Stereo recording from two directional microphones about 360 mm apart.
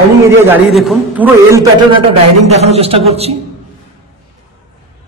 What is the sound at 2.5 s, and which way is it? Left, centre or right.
Speech, centre.